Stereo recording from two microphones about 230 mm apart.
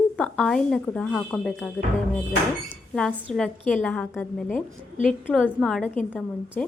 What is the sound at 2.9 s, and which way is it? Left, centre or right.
A woman's voice, centre.